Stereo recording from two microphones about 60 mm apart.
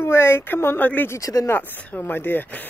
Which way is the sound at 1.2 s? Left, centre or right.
Left.